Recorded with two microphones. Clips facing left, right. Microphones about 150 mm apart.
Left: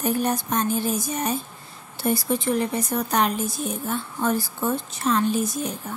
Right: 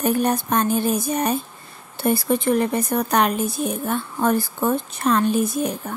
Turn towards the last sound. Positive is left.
turn(degrees=-60)  # may be behind; listen again after turning